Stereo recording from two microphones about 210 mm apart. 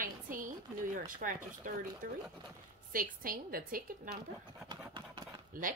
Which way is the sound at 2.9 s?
40° right (ahead or behind).